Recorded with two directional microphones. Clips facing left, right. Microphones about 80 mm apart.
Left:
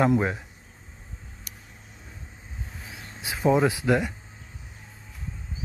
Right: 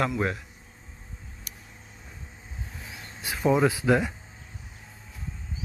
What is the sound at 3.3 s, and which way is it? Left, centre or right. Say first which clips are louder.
Speech: left 1 dB; centre.